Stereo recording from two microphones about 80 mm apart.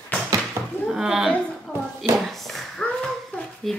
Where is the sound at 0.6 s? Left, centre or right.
Right.